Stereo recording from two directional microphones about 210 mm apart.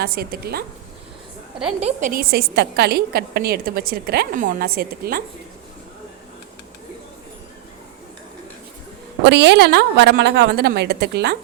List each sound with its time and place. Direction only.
0.0 s a woman's voice: 45° right (ahead or behind)
1.8 s a woman's voice: 35° right (ahead or behind)
9.2 s a woman's voice: 55° right (ahead or behind)